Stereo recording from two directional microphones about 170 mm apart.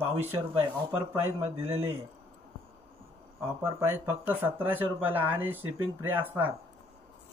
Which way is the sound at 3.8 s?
10° right (ahead or behind).